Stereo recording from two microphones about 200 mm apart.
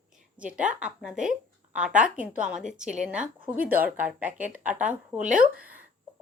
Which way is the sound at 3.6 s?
45° right (ahead or behind).